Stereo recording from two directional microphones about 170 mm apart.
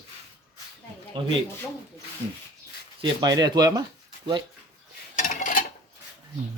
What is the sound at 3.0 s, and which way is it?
Speech, 25° right (ahead or behind).